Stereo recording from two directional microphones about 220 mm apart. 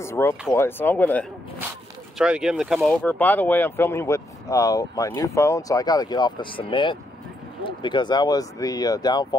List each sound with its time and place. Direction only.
0.0 s speech: 10° left (ahead or behind)
2.1 s speech: 5° right (ahead or behind); by 9.4 s 20° left (ahead or behind)